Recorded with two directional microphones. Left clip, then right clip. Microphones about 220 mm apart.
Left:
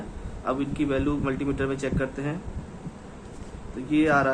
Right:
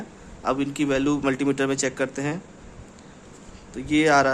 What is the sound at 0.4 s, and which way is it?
A man's voice, 60° right (ahead or behind).